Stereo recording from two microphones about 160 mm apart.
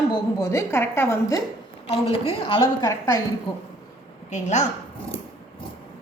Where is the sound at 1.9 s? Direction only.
35° left (ahead or behind).